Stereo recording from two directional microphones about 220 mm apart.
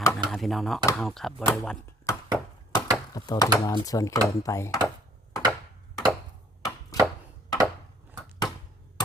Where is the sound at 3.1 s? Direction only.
15° left (ahead or behind).